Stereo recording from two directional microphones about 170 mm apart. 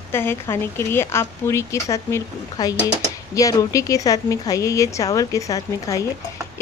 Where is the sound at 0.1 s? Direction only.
15° left (ahead or behind).